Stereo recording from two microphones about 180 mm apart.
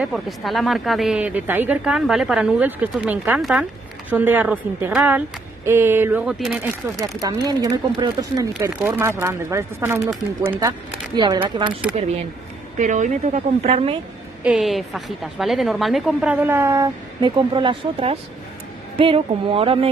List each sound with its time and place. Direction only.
0.0 s a woman's voice: centre (ahead or behind)
7.0 s speech: 20° right (ahead or behind)
12.7 s speech: 45° right (ahead or behind)
14.4 s a woman's voice: 5° right (ahead or behind); by 19.9 s 30° right (ahead or behind)